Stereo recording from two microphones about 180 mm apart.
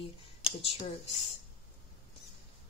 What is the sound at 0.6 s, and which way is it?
Speech, 30° left (ahead or behind).